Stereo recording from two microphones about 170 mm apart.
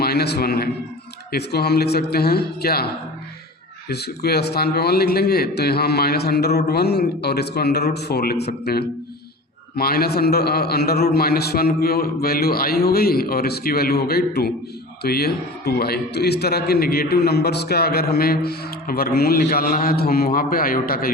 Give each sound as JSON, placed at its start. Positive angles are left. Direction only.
{"t": 0.0, "sound": "a man's voice", "side_deg": 65}